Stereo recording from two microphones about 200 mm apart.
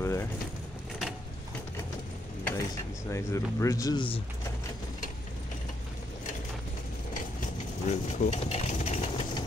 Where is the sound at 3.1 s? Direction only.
15° left (ahead or behind).